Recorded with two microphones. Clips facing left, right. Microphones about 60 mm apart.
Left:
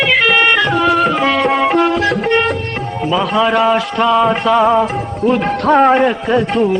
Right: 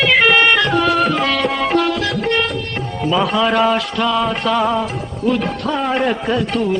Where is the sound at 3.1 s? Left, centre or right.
Centre.